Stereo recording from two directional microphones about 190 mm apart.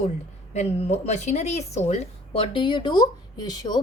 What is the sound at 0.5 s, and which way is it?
Speech, 35° left (ahead or behind).